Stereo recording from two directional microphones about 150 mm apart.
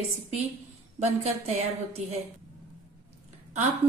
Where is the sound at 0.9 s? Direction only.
45° right (ahead or behind).